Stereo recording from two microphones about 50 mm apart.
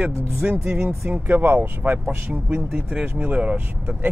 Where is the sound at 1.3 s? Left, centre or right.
Right.